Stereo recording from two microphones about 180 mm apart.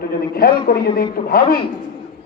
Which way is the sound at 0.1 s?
55° left (ahead or behind).